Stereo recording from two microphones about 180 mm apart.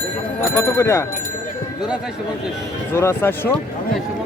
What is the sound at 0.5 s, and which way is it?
Speech, 15° left (ahead or behind).